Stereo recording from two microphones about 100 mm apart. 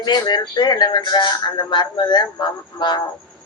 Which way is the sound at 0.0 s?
45° left (ahead or behind).